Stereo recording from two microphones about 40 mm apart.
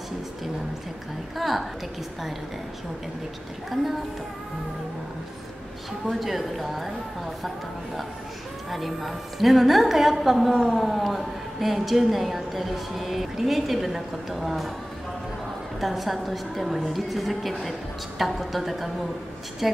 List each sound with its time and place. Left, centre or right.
1.3 s a woman's voice: centre
3.7 s a woman's voice: centre
6.0 s a woman's voice: centre
8.6 s a woman's voice: centre
15.8 s a woman's voice: centre